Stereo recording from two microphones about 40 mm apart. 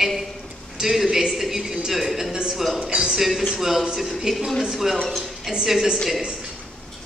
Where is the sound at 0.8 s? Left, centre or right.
Centre.